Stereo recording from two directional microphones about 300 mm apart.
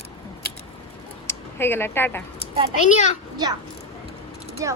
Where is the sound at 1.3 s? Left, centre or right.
Centre.